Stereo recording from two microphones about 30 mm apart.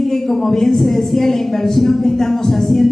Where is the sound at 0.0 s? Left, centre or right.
Centre.